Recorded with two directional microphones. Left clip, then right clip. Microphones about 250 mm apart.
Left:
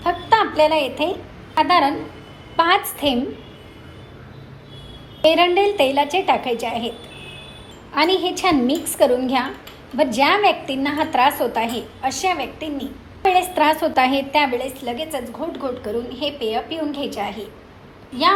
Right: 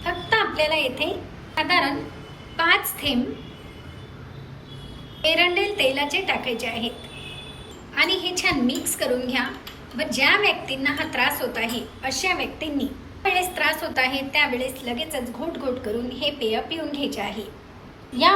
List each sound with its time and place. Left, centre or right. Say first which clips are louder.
0.0 s a sound: left 5 dB; centre
1.5 s a woman's voice: left 5 dB; centre
5.2 s a woman's voice: left 5 dB; centre
7.9 s a woman's voice: left 4 dB; centre